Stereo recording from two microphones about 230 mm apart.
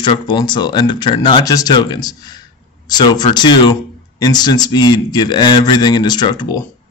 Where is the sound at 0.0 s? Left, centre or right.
Left.